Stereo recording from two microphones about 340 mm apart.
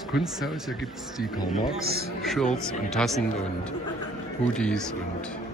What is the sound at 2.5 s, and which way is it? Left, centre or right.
Speech, centre.